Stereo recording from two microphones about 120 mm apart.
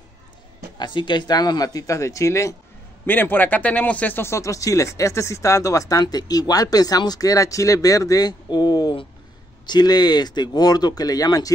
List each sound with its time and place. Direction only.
0.7 s speech: 40° left (ahead or behind)